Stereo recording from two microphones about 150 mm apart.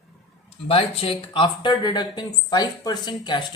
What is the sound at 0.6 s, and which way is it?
Speech, 40° left (ahead or behind).